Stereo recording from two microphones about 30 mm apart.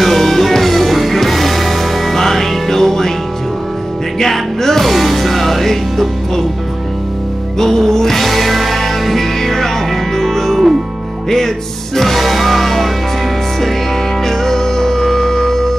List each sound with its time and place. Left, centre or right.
0.0 s music: centre
2.1 s music: centre
4.2 s music: centre
7.5 s music: centre
8.2 s music: centre
14.2 s music: centre